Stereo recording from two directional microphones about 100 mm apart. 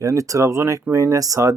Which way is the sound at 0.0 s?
35° right (ahead or behind).